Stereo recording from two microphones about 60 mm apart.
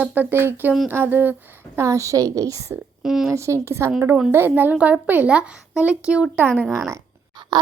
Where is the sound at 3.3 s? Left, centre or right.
Right.